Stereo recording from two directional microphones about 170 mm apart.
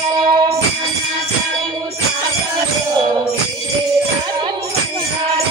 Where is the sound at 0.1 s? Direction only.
25° right (ahead or behind).